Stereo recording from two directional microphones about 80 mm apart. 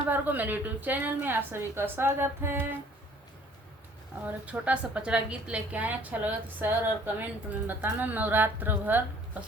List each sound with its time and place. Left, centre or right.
0.1 s a woman's voice: right
4.3 s a woman's voice: centre